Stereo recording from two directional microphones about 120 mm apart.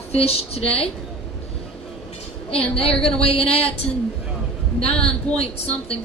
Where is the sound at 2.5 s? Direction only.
55° left (ahead or behind).